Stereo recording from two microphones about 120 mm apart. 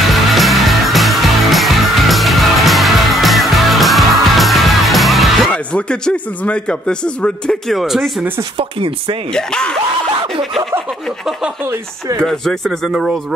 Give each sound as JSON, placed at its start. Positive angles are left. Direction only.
{"t": 0.1, "sound": "music", "side_deg": 0}
{"t": 5.5, "sound": "speech", "side_deg": 10}
{"t": 8.5, "sound": "speech", "side_deg": -45}
{"t": 9.3, "sound": "speech", "side_deg": 5}
{"t": 10.2, "sound": "speech", "side_deg": -45}
{"t": 11.6, "sound": "speech", "side_deg": -20}
{"t": 12.2, "sound": "speech", "side_deg": 5}